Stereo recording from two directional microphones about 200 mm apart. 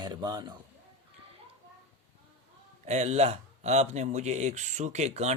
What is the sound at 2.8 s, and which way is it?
Speech, 35° right (ahead or behind).